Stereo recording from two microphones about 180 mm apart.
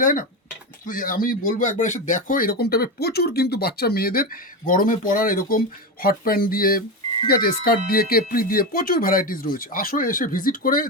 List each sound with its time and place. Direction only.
0.0 s speech: 50° left (ahead or behind)